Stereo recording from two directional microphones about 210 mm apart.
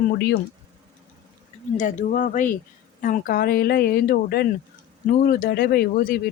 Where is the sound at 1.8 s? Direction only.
35° left (ahead or behind).